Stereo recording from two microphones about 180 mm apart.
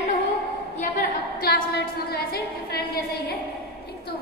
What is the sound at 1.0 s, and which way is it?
A woman's voice, 55° left (ahead or behind).